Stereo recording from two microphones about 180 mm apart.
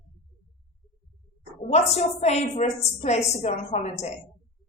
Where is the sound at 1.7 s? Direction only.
35° left (ahead or behind).